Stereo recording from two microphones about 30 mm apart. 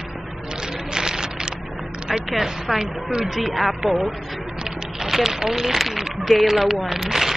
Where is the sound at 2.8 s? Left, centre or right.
Right.